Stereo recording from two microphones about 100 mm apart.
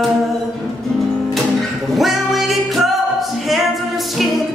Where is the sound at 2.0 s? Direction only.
Centre (ahead or behind).